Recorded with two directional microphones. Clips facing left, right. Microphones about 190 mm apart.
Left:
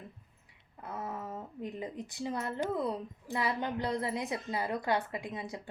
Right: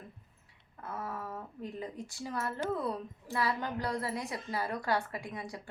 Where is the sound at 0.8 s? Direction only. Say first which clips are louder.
Even; 20° left (ahead or behind).